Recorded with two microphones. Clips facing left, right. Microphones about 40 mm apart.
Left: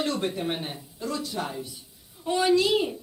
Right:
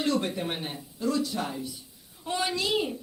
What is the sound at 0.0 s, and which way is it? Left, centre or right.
Speech, left.